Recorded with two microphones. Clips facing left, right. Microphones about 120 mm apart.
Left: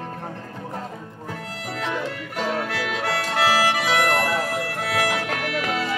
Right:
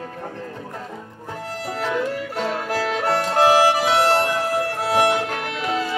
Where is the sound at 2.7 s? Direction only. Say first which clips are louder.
Right 4 dB; 35° right (ahead or behind).